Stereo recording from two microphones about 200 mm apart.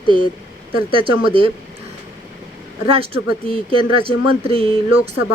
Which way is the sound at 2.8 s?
30° right (ahead or behind).